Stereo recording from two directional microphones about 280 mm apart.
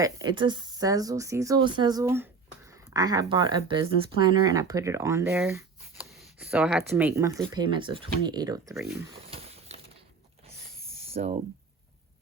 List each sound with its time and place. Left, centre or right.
0.0 s speech: centre
8.7 s speech: centre
11.1 s speech: right